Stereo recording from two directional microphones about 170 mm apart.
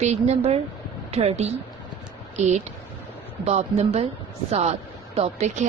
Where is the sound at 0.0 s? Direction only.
40° right (ahead or behind).